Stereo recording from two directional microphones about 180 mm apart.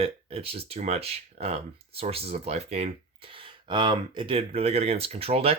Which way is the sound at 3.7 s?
25° right (ahead or behind).